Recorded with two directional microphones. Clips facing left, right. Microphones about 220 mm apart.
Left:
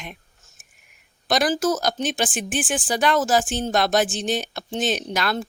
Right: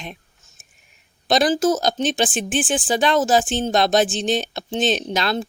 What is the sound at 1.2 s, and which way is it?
Speech, 25° right (ahead or behind).